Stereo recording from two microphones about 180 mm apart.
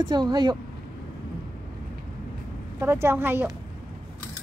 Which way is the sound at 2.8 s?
15° right (ahead or behind).